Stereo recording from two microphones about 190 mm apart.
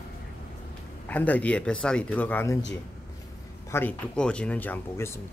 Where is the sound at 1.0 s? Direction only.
10° left (ahead or behind).